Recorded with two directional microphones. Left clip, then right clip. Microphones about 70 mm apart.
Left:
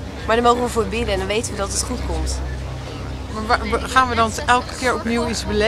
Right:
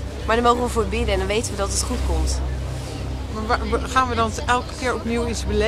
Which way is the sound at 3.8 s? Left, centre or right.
Centre.